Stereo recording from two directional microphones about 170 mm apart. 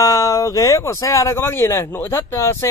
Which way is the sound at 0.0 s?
20° left (ahead or behind).